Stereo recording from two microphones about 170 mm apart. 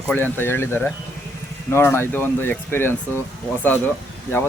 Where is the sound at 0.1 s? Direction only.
10° left (ahead or behind).